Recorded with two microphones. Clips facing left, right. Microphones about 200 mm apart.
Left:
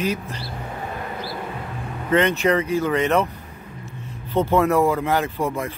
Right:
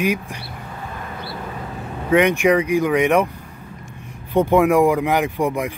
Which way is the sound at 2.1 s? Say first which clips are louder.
Right 3 dB; 15° right (ahead or behind).